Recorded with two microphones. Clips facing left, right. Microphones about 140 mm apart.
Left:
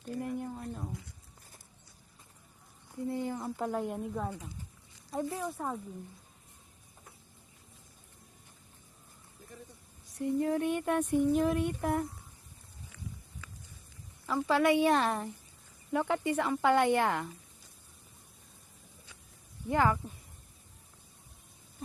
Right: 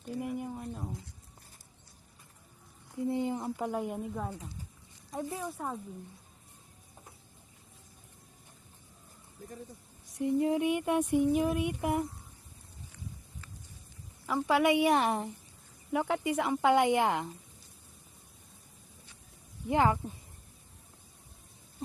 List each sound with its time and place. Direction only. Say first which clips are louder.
0.0 s a sound: even; 5° right (ahead or behind)
3.0 s a sound: right 3 dB; 20° right (ahead or behind)
3.7 s a woman's voice: even; 5° right (ahead or behind)
5.4 s a woman's voice: left 1 dB; centre (ahead or behind)
10.2 s speech: right 2 dB; 20° right (ahead or behind)
14.3 s speech: even; 15° right (ahead or behind)
19.6 s speech: right 1 dB; 20° right (ahead or behind)